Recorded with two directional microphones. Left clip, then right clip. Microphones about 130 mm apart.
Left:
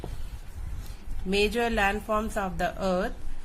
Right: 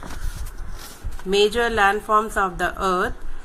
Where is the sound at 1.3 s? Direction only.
20° left (ahead or behind).